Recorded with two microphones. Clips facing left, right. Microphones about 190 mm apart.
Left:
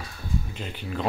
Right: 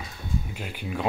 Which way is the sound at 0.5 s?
10° right (ahead or behind).